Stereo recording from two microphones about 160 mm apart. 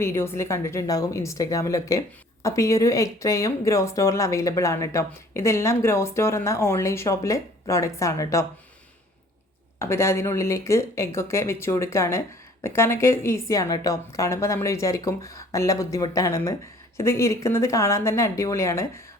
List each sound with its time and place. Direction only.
0.0 s a woman's voice: 15° left (ahead or behind)
9.7 s a woman's voice: 15° left (ahead or behind)